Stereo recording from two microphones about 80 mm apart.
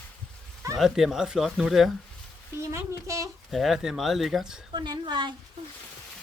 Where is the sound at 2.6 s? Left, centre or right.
Right.